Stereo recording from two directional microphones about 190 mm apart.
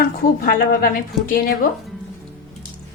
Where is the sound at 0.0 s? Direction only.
55° left (ahead or behind).